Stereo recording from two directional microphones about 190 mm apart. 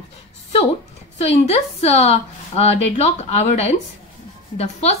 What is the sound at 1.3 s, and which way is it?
Speech, 35° left (ahead or behind).